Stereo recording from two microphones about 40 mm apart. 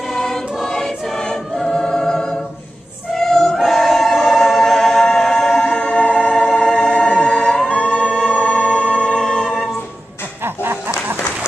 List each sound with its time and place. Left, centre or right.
0.1 s choir: centre
3.5 s choir: centre
5.0 s music: centre
6.3 s music: centre
6.6 s music: centre
7.6 s music: left
8.0 s music: centre
8.4 s music: left
8.6 s music: left
10.4 s a sound: right